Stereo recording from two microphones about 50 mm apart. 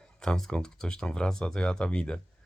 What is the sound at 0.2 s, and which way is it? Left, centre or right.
Speech, centre.